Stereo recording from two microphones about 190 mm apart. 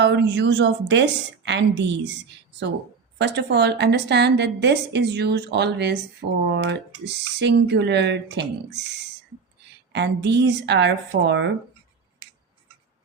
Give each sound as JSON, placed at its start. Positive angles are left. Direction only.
{"t": 0.0, "sound": "a woman's voice", "side_deg": -65}
{"t": 3.2, "sound": "a woman's voice", "side_deg": -60}
{"t": 9.9, "sound": "a woman's voice", "side_deg": -65}